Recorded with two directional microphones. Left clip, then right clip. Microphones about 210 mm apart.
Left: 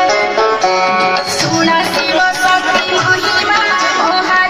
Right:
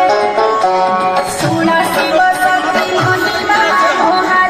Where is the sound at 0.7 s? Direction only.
30° right (ahead or behind).